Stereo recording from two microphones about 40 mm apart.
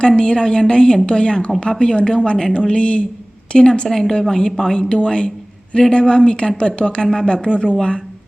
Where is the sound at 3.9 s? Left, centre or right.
Centre.